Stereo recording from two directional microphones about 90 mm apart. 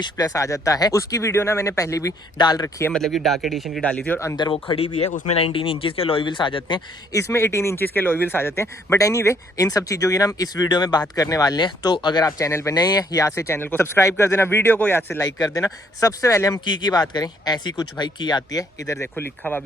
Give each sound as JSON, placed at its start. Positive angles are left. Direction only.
{"t": 0.0, "sound": "speech", "side_deg": 40}
{"t": 2.4, "sound": "speech", "side_deg": 45}
{"t": 2.9, "sound": "speech", "side_deg": 0}
{"t": 3.8, "sound": "speech", "side_deg": 15}
{"t": 5.4, "sound": "speech", "side_deg": 85}
{"t": 7.1, "sound": "speech", "side_deg": 30}
{"t": 12.7, "sound": "speech", "side_deg": 45}
{"t": 15.2, "sound": "speech", "side_deg": 40}
{"t": 16.6, "sound": "speech", "side_deg": 55}
{"t": 18.9, "sound": "speech", "side_deg": 25}